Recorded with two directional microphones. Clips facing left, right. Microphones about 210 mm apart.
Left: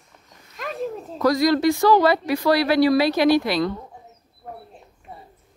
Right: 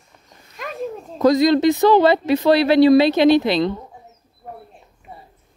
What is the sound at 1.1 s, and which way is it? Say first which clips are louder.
Speech: right 4 dB; 20° right (ahead or behind).